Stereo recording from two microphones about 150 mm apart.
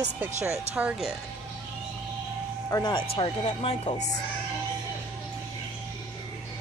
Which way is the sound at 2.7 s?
30° left (ahead or behind).